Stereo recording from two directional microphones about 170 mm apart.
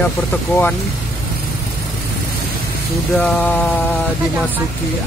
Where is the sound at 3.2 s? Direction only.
10° left (ahead or behind).